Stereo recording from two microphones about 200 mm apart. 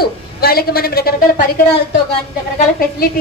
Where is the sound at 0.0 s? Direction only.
50° left (ahead or behind).